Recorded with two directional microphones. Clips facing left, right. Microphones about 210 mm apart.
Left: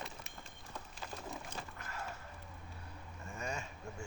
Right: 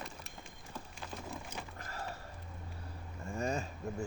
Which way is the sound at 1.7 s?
35° right (ahead or behind).